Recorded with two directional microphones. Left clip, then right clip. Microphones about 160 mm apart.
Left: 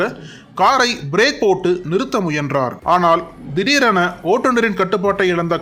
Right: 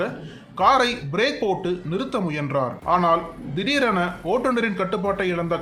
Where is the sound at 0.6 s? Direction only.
35° left (ahead or behind).